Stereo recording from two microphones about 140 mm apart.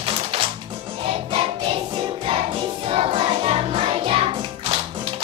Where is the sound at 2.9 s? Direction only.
45° right (ahead or behind).